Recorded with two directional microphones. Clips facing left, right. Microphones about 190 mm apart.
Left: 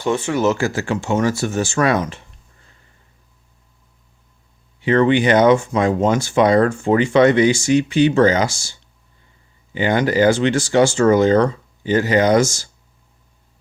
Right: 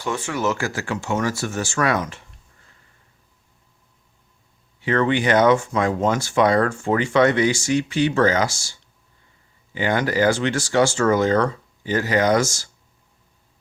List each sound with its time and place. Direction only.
0.0 s speech: 25° left (ahead or behind)
4.8 s speech: 20° left (ahead or behind)
9.7 s speech: 20° left (ahead or behind)